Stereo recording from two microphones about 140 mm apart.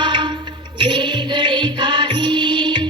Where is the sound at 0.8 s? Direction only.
35° right (ahead or behind).